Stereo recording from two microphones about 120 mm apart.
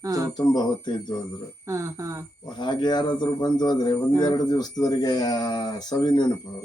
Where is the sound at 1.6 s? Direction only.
25° right (ahead or behind).